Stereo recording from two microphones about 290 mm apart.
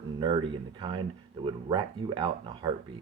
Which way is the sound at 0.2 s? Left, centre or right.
Centre.